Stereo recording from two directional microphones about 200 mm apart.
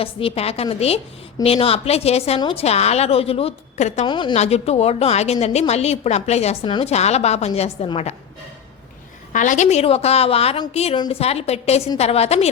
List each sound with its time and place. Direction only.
0.0 s a woman's voice: 30° left (ahead or behind)
4.1 s a woman's voice: 25° left (ahead or behind)
9.3 s a woman's voice: 40° left (ahead or behind)